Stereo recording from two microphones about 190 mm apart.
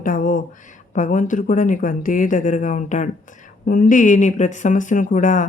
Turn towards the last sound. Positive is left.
turn(degrees=45)  # may be behind; listen again after turning